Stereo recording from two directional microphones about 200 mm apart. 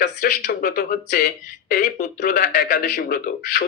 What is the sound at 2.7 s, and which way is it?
Speech, 55° left (ahead or behind).